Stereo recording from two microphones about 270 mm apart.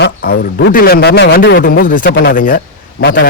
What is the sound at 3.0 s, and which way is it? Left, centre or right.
Speech, left.